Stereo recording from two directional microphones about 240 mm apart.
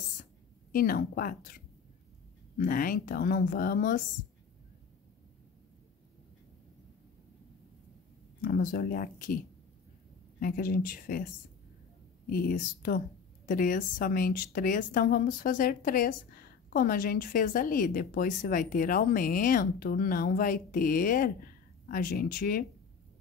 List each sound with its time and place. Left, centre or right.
0.2 s a sound: left
2.5 s a woman's voice: left
8.4 s a woman's voice: left
10.4 s a woman's voice: left
12.3 s a woman's voice: left